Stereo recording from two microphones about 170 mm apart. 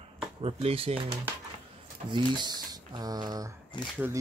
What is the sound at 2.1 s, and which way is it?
Speech, 25° right (ahead or behind).